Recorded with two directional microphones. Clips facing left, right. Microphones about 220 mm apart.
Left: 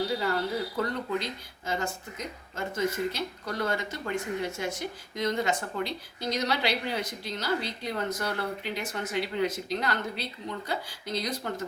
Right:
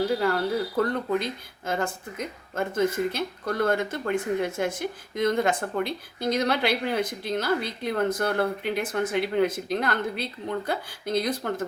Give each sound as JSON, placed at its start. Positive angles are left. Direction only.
{"t": 0.1, "sound": "speech", "side_deg": -55}